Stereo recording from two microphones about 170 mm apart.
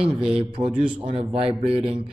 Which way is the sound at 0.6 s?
25° right (ahead or behind).